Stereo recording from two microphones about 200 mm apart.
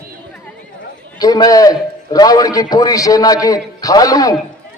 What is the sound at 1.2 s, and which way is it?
A man's voice, 20° left (ahead or behind).